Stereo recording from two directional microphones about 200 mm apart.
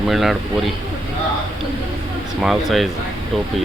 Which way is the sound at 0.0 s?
Centre (ahead or behind).